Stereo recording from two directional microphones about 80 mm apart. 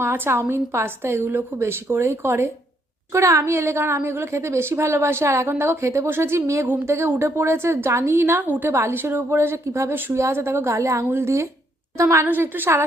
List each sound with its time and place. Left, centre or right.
0.0 s a woman's voice: right